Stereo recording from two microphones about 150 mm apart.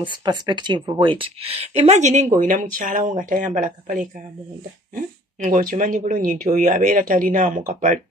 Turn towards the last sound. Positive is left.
turn(degrees=-55)  # may be behind; listen again after turning